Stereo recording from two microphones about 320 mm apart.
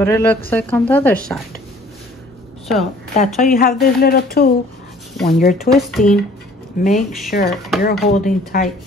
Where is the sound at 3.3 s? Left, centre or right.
Left.